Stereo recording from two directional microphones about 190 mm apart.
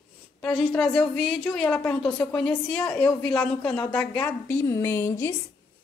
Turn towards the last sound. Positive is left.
turn(degrees=10)  # may be behind; listen again after turning